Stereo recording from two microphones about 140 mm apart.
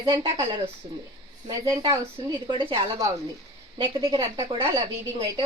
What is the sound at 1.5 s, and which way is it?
A woman's voice, 30° right (ahead or behind).